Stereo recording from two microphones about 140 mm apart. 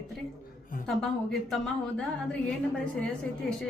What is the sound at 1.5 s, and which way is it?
Speech, 5° left (ahead or behind).